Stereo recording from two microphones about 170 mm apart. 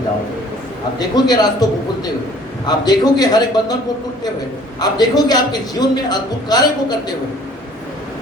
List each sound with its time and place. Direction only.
0.9 s a man's voice: 25° left (ahead or behind)
2.6 s a man's voice: 25° left (ahead or behind)
4.8 s a man's voice: 25° left (ahead or behind)